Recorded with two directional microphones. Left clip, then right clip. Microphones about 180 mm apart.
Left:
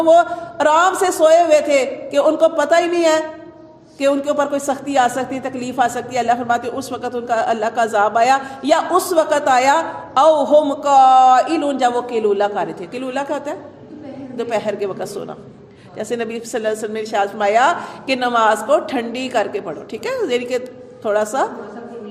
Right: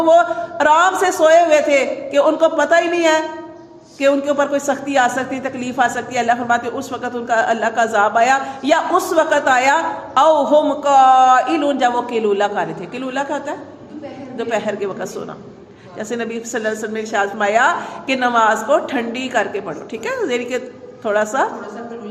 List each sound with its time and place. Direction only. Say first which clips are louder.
0.0 s a man's voice: even; 35° left (ahead or behind)